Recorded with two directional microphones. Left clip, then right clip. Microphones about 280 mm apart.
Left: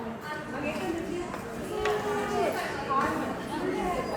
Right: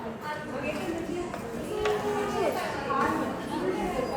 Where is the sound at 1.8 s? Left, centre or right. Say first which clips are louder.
Right 1 dB; centre.